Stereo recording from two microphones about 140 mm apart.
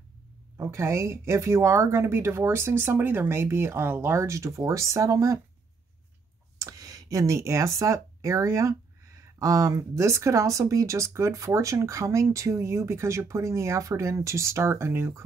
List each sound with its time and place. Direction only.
0.6 s speech: 20° right (ahead or behind)
6.6 s speech: 25° right (ahead or behind)